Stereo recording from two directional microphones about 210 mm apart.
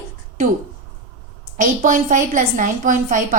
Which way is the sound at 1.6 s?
40° right (ahead or behind).